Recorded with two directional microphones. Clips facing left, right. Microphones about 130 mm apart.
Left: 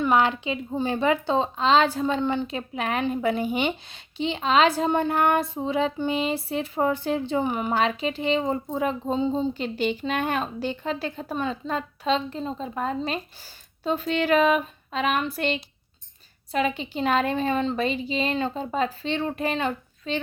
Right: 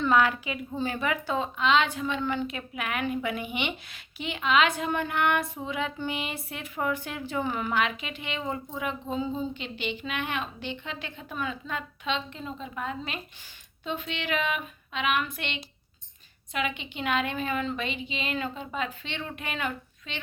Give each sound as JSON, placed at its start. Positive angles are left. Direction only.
{"t": 0.0, "sound": "speech", "side_deg": 25}
{"t": 2.2, "sound": "a woman's voice", "side_deg": 25}
{"t": 7.7, "sound": "a woman's voice", "side_deg": 30}
{"t": 9.6, "sound": "a woman's voice", "side_deg": 40}